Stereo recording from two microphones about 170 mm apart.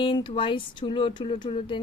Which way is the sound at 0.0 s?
30° left (ahead or behind).